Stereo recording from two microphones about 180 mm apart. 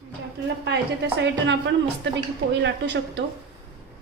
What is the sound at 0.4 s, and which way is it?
A woman's voice, 75° right (ahead or behind).